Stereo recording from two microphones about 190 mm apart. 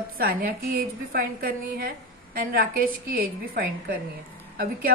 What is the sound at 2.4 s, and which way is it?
A woman's voice, 50° right (ahead or behind).